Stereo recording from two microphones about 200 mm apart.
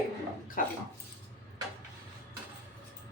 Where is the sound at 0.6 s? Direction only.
45° left (ahead or behind).